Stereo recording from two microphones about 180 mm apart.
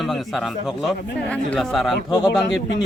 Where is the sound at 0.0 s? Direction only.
Centre (ahead or behind).